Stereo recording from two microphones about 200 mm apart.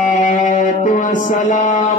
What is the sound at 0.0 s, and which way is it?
Music, 40° left (ahead or behind).